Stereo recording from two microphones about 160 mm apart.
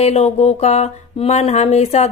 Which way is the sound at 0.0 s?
40° left (ahead or behind).